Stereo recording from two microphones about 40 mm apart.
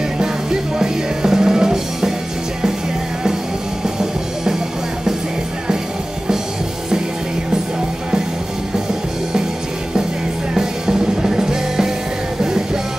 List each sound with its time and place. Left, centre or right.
0.2 s music: centre
3.8 s music: centre
10.5 s music: centre